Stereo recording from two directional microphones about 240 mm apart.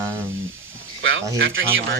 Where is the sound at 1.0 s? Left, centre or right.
Right.